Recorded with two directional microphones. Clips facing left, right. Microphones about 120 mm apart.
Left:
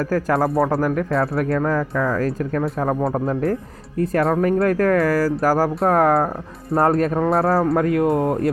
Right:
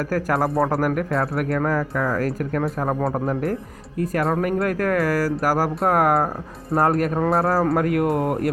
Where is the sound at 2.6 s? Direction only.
Centre (ahead or behind).